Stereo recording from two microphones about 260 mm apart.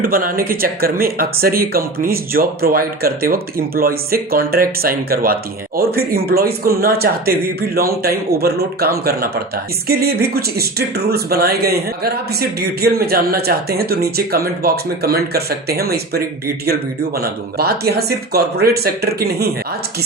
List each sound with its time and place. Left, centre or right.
0.0 s speech: right